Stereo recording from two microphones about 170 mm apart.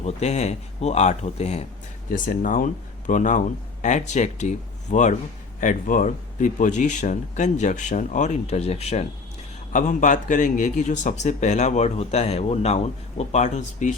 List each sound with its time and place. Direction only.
0.0 s speech: 40° left (ahead or behind)
2.1 s a man's voice: 50° left (ahead or behind)